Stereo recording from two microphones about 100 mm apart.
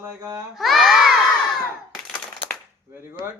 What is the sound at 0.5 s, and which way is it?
Speech, centre (ahead or behind).